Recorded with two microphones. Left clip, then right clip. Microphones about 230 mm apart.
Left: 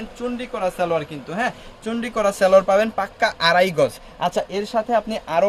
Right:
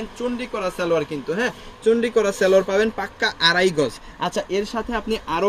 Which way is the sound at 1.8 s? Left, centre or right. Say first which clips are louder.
Right 4 dB; left.